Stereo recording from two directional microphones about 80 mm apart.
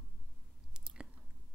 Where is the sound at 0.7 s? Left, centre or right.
Centre.